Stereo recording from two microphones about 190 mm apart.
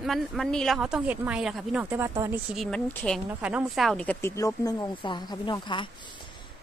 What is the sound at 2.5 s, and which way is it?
Speech, centre (ahead or behind).